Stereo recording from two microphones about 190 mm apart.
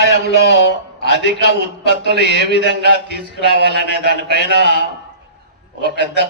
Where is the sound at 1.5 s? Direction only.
60° right (ahead or behind).